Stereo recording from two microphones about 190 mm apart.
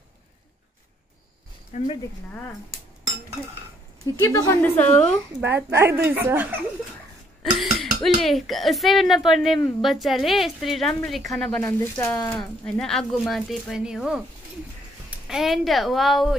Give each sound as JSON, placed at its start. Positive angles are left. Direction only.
{"t": 1.7, "sound": "speech", "side_deg": 40}
{"t": 4.0, "sound": "a woman's voice", "side_deg": 15}
{"t": 5.4, "sound": "a woman's voice", "side_deg": -10}
{"t": 7.7, "sound": "dishes", "side_deg": 0}
{"t": 8.2, "sound": "speech", "side_deg": 0}